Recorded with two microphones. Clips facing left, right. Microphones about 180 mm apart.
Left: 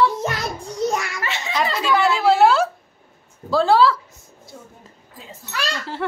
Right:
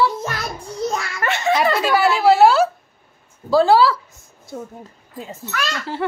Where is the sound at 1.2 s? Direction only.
55° right (ahead or behind).